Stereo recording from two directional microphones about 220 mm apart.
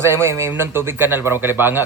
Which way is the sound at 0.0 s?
10° right (ahead or behind).